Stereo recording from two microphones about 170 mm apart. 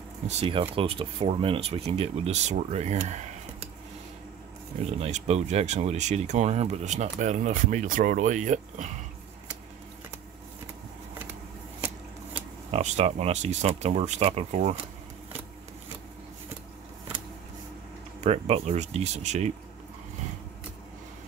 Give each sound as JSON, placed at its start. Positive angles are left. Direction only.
{"t": 0.3, "sound": "speech", "side_deg": -35}
{"t": 4.9, "sound": "speech", "side_deg": -40}
{"t": 12.7, "sound": "speech", "side_deg": -40}
{"t": 18.2, "sound": "speech", "side_deg": -40}